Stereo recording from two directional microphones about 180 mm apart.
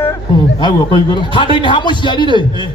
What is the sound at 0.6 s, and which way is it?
A man's voice, 25° left (ahead or behind).